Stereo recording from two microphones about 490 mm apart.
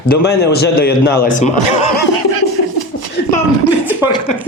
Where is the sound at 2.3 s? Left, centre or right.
Right.